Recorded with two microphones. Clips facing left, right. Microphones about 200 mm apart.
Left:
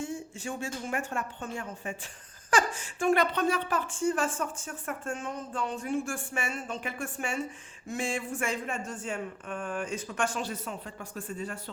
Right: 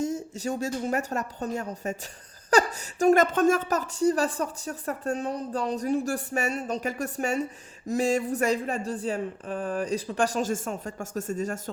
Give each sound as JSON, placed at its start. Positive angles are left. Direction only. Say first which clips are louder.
{"t": 0.0, "sound": "a woman's voice", "louder": "right 7 dB", "side_deg": -40}